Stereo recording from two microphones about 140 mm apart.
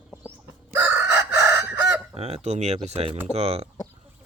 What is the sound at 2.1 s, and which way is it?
Speech, 50° right (ahead or behind).